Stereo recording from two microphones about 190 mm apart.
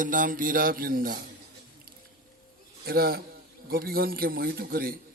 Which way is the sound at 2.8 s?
55° right (ahead or behind).